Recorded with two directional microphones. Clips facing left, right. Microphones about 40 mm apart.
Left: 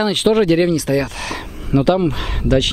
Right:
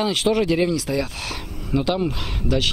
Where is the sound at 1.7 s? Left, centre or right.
Left.